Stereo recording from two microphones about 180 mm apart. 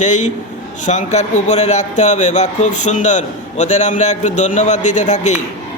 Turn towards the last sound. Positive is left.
turn(degrees=40)  # may be behind; listen again after turning